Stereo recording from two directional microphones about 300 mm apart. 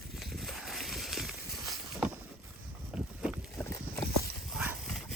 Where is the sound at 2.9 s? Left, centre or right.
Centre.